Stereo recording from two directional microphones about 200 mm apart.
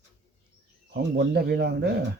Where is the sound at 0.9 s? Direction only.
55° right (ahead or behind).